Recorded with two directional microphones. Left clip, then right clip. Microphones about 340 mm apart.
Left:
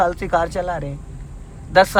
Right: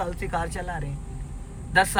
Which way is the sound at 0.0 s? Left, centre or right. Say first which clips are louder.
Left 11 dB; centre.